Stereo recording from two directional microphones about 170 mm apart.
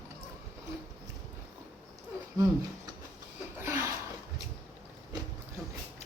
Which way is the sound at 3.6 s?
15° right (ahead or behind).